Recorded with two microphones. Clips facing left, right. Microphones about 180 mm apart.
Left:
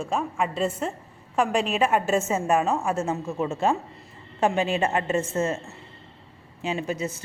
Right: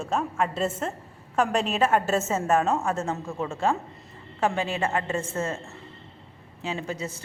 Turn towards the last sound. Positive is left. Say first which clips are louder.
# left 3 dB
turn(degrees=15)  # may be behind; listen again after turning